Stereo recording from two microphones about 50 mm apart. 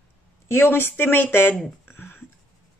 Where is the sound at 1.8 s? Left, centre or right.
Left.